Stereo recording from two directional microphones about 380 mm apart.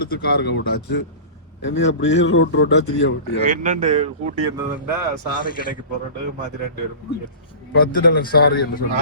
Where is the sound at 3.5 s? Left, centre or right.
Centre.